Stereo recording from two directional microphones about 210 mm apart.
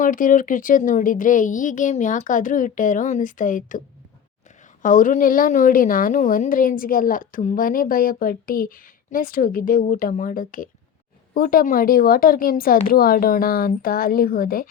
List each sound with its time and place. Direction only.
0.0 s a woman's voice: 40° left (ahead or behind)